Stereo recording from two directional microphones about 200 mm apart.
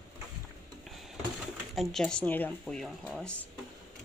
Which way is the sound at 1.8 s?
Centre (ahead or behind).